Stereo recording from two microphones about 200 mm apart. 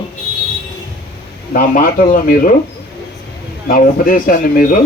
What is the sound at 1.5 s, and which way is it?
Speech, 45° left (ahead or behind).